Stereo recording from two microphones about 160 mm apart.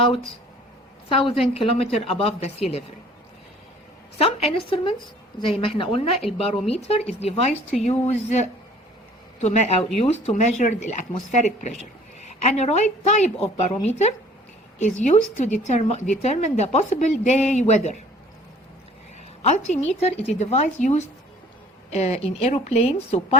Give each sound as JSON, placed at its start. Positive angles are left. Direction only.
{"t": 1.1, "sound": "speech", "side_deg": 35}
{"t": 4.2, "sound": "speech", "side_deg": 35}
{"t": 14.8, "sound": "speech", "side_deg": 50}
{"t": 19.4, "sound": "speech", "side_deg": 45}